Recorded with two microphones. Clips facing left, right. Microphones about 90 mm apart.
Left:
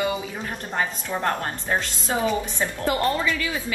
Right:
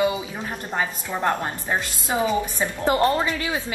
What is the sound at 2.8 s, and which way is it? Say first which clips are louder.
Speech: right 3 dB; 30° right (ahead or behind).